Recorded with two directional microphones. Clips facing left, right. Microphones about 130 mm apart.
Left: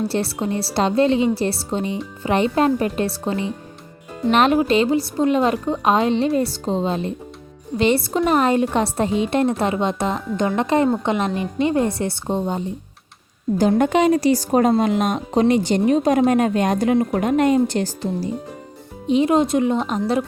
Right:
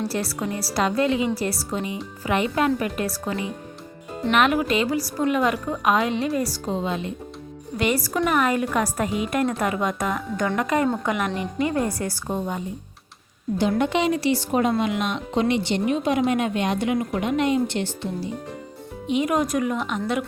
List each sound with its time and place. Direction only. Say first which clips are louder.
0.0 s a woman's voice: left 4 dB; 25° left (ahead or behind)
13.6 s a woman's voice: left 5 dB; 45° left (ahead or behind)